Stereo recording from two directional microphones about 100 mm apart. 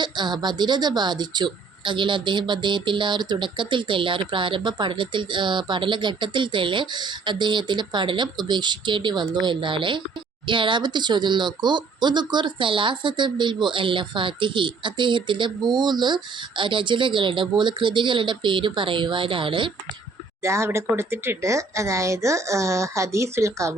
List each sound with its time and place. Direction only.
0.0 s speech: 50° right (ahead or behind)
20.4 s speech: 30° right (ahead or behind)